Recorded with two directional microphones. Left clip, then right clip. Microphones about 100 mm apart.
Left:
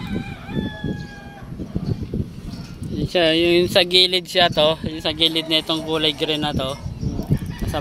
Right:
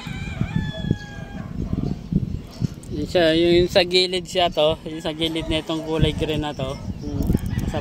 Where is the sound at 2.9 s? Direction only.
25° right (ahead or behind).